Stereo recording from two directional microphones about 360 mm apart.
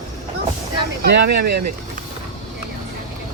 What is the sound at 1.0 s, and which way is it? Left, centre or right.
Speech, right.